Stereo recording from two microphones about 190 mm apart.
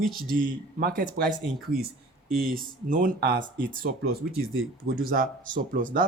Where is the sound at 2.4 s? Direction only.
50° right (ahead or behind).